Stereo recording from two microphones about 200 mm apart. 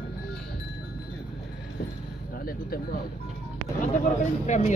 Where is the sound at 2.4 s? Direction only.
45° left (ahead or behind).